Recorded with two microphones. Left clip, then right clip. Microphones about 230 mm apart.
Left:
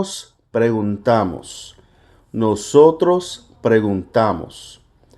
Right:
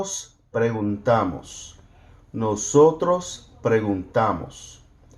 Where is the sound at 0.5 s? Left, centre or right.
Left.